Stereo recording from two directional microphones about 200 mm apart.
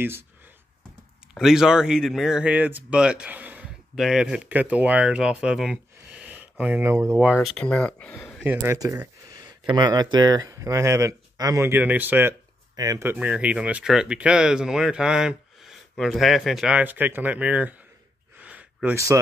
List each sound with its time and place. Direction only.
1.3 s speech: centre (ahead or behind)
7.4 s speech: 5° left (ahead or behind)
8.4 s speech: 5° right (ahead or behind)
18.4 s gasp: 5° right (ahead or behind)